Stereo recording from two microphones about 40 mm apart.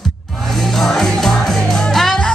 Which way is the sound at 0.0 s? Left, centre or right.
Centre.